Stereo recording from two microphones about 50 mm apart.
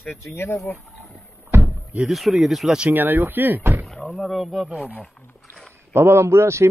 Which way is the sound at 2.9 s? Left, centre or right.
Right.